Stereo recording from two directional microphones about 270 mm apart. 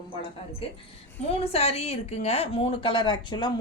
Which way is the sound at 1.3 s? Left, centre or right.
Left.